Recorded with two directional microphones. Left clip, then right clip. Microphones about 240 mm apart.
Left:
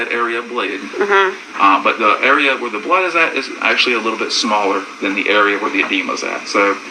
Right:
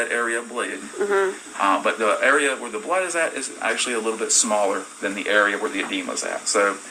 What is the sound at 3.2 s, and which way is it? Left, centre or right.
Speech, right.